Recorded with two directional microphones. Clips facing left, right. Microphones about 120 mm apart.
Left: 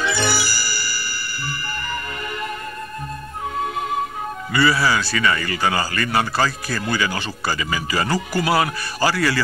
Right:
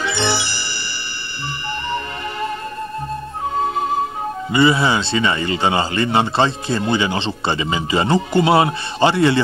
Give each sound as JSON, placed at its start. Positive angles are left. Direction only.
{"t": 0.1, "sound": "music", "side_deg": -25}
{"t": 4.5, "sound": "speech", "side_deg": -20}